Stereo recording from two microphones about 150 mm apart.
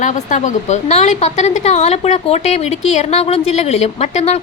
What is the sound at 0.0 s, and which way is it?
A woman's voice, 55° left (ahead or behind).